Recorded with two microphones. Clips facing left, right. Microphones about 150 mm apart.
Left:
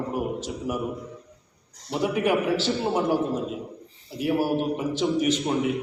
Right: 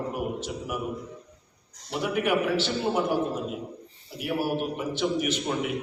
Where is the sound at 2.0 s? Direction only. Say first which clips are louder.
Left 2 dB; 35° left (ahead or behind).